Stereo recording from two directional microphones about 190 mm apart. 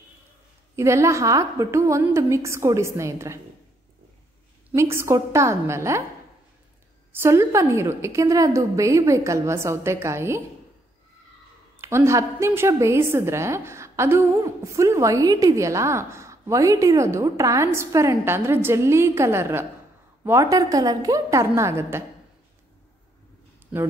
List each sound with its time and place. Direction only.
0.7 s a woman's voice: 15° right (ahead or behind)
4.6 s a woman's voice: 15° right (ahead or behind)
7.1 s a woman's voice: 15° right (ahead or behind)
11.8 s a woman's voice: 15° right (ahead or behind)